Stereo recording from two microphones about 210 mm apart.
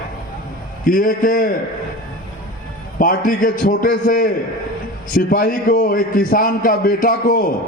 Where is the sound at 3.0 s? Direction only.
40° left (ahead or behind).